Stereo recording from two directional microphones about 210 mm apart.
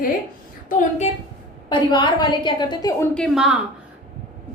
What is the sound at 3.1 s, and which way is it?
Speech, centre (ahead or behind).